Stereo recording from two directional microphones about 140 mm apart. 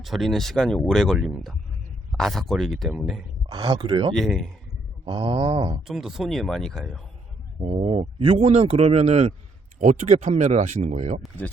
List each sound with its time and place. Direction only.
0.0 s speech: centre (ahead or behind)
3.5 s a sound: 35° right (ahead or behind)
4.1 s speech: centre (ahead or behind)
5.0 s a sound: 35° right (ahead or behind)
5.9 s speech: 5° right (ahead or behind)
7.6 s speech: 45° right (ahead or behind)